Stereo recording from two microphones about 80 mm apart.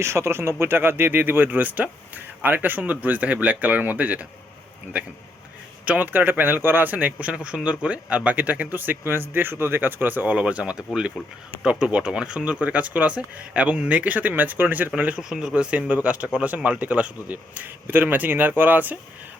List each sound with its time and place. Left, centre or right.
0.0 s a man's voice: right
5.8 s a man's voice: right
15.2 s a man's voice: centre